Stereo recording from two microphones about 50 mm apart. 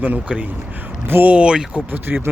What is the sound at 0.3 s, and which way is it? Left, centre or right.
Speech, right.